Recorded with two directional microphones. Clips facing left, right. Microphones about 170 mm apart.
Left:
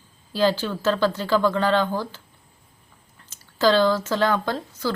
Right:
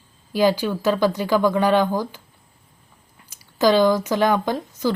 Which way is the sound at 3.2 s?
15° right (ahead or behind).